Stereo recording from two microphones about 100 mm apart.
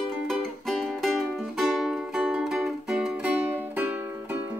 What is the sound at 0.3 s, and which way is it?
Music, 5° left (ahead or behind).